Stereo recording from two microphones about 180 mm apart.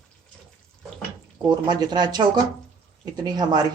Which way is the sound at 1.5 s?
25° right (ahead or behind).